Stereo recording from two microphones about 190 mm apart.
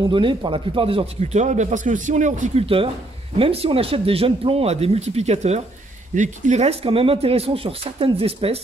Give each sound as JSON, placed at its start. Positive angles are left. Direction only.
{"t": 0.0, "sound": "speech", "side_deg": -25}